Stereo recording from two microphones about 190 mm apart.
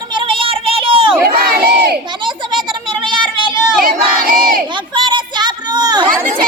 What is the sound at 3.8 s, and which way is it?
Crowd, 50° right (ahead or behind).